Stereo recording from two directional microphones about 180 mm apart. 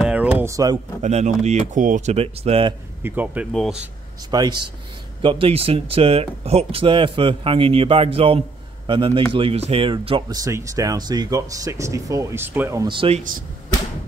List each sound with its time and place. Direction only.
0.0 s music: 5° right (ahead or behind)
1.0 s speech: 40° right (ahead or behind)
3.0 s speech: 10° right (ahead or behind)
4.3 s a man's voice: 25° right (ahead or behind)
12.8 s speech: 30° right (ahead or behind)